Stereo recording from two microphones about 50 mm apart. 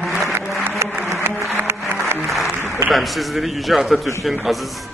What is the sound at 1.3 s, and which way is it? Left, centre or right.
Music, right.